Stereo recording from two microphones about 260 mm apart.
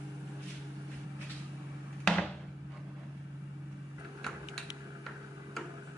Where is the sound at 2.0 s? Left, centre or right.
Centre.